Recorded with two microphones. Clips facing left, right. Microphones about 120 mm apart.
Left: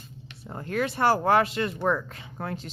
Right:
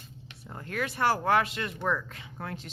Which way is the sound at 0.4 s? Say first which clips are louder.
Left 6 dB; 35° left (ahead or behind).